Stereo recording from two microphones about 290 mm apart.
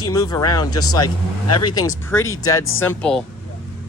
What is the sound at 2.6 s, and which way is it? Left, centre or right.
Speech, left.